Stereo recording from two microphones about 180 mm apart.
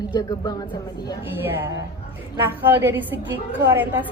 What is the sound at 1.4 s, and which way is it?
A woman's voice, 15° right (ahead or behind).